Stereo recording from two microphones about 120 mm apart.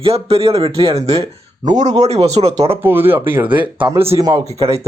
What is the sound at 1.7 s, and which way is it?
Speech, 85° right.